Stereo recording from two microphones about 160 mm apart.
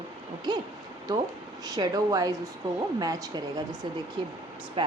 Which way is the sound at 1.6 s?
25° right (ahead or behind).